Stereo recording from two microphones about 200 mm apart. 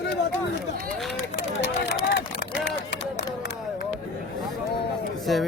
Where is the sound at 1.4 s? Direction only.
55° left (ahead or behind).